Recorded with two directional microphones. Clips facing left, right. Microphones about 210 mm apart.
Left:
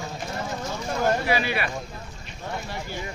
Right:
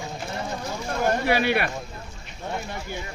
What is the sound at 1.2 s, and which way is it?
Speech, 60° right (ahead or behind).